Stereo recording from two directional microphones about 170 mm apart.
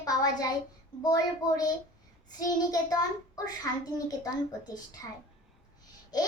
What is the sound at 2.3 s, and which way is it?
A child's voice, 20° left (ahead or behind).